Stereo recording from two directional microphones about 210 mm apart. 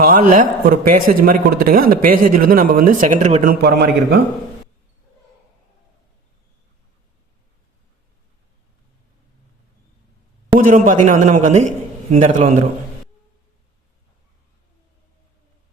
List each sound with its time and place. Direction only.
0.0 s a man's voice: 40° right (ahead or behind)
10.6 s a man's voice: 40° right (ahead or behind)